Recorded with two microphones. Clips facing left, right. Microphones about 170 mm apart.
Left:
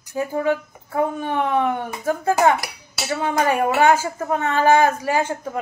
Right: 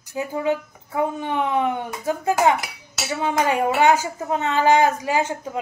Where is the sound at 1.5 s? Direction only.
15° right (ahead or behind).